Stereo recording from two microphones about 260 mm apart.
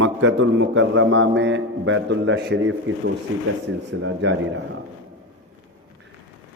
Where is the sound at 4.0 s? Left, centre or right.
Right.